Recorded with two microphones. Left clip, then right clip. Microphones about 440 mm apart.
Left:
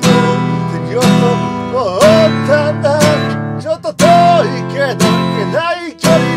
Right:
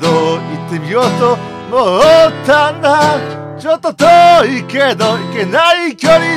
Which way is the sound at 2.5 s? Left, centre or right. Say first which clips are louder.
Right 3 dB; right.